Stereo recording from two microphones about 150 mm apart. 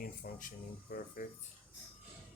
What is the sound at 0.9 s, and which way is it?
Speech, 85° left.